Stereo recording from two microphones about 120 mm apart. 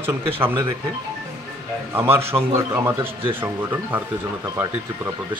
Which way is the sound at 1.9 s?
20° right (ahead or behind).